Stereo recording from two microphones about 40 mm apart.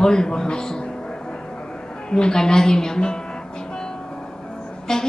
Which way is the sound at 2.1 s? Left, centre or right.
Centre.